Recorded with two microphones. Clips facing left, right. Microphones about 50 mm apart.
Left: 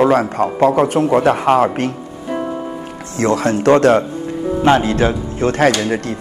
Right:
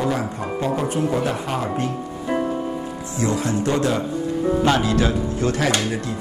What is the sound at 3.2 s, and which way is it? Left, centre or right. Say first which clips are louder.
Speech: left 6 dB; left.